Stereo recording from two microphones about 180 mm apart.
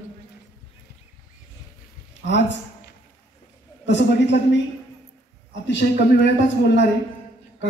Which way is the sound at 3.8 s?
75° left (ahead or behind).